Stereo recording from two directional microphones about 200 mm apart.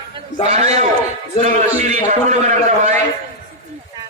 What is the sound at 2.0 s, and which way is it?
Speech, 35° right (ahead or behind).